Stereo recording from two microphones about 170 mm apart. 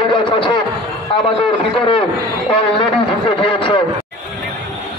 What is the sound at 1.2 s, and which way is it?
Speech, 30° left (ahead or behind).